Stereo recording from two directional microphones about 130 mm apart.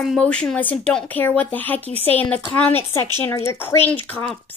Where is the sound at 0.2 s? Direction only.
5° left (ahead or behind).